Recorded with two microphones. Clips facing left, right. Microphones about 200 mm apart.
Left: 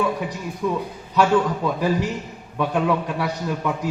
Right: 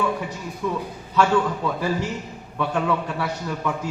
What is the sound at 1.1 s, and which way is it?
A man's voice, 15° left (ahead or behind).